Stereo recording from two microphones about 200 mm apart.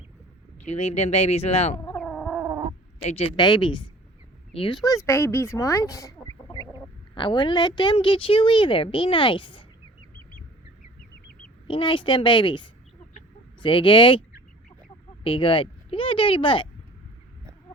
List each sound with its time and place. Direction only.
0.6 s speech: 30° left (ahead or behind)
1.8 s cat: 5° left (ahead or behind)
2.4 s cat: 15° right (ahead or behind)
3.1 s a woman's voice: 30° left (ahead or behind)
11.7 s a woman's voice: 25° left (ahead or behind)